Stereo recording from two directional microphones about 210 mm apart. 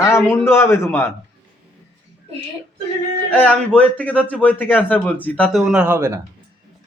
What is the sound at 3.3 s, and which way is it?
A man's voice, 5° left (ahead or behind).